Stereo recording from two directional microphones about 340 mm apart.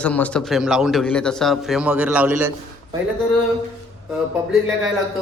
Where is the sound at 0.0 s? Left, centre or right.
Centre.